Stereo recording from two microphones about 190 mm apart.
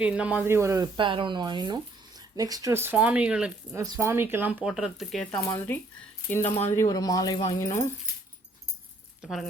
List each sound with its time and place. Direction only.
0.0 s speech: 5° right (ahead or behind)
3.8 s speech: 15° right (ahead or behind); by 5.3 s centre (ahead or behind)
5.3 s speech: 15° left (ahead or behind)
6.4 s speech: 35° left (ahead or behind)
6.7 s speech: 20° left (ahead or behind)
9.2 s speech: centre (ahead or behind)